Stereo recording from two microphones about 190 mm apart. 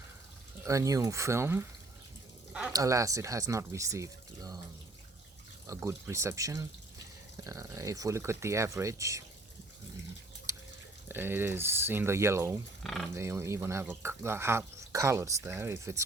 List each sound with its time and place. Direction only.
0.6 s speech: 15° right (ahead or behind)
2.5 s a sound: 5° right (ahead or behind)
2.7 s speech: 15° right (ahead or behind)
5.6 s speech: 15° right (ahead or behind)
10.5 s a sound: 15° right (ahead or behind)
11.1 s speech: 10° right (ahead or behind)
12.8 s speech: centre (ahead or behind)
13.1 s speech: 15° right (ahead or behind)